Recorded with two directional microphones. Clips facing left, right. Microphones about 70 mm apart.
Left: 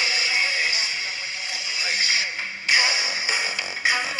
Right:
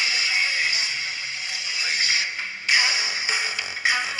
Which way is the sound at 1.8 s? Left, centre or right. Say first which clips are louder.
Even; centre.